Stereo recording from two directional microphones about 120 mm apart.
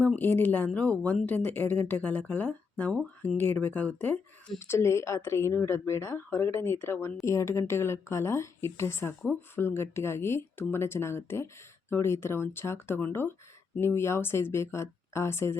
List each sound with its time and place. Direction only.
0.2 s speech: 15° left (ahead or behind)